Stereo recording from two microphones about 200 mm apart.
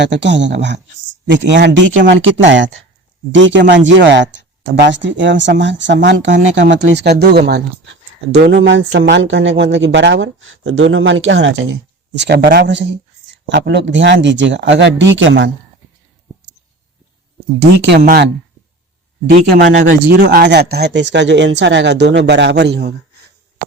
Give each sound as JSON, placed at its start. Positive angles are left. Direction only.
{"t": 0.0, "sound": "speech", "side_deg": -60}
{"t": 17.7, "sound": "speech", "side_deg": -65}
{"t": 18.0, "sound": "speech", "side_deg": -50}
{"t": 19.3, "sound": "speech", "side_deg": -60}